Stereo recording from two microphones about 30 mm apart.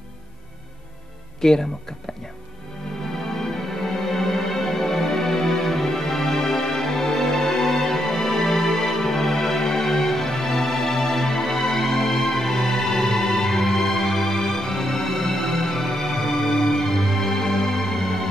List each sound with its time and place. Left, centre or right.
1.4 s speech: centre
3.3 s music: centre